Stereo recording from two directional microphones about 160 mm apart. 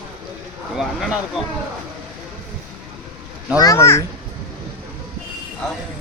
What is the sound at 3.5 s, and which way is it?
Speech, 20° left (ahead or behind).